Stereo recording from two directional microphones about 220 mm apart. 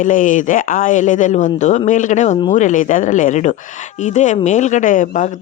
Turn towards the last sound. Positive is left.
turn(degrees=35)  # may be behind; listen again after turning